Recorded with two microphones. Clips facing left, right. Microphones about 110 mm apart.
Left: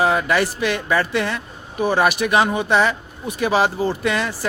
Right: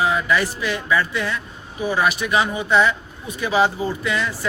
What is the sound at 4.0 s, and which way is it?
Speech, 50° left (ahead or behind).